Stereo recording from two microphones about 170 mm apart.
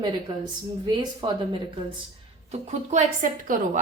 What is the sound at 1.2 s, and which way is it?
Speech, 25° right (ahead or behind).